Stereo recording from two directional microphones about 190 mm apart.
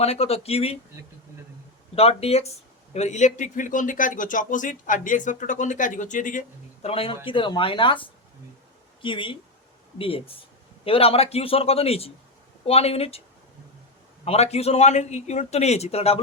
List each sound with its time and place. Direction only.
0.0 s a man's voice: 35° left (ahead or behind)
2.0 s a man's voice: 30° left (ahead or behind)
6.8 s a man's voice: 30° left (ahead or behind)
14.3 s a man's voice: 35° left (ahead or behind)